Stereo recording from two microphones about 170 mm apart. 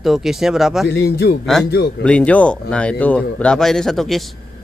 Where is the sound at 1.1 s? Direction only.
65° left (ahead or behind).